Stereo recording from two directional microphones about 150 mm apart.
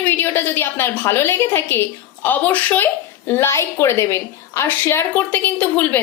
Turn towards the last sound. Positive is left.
turn(degrees=10)  # may be behind; listen again after turning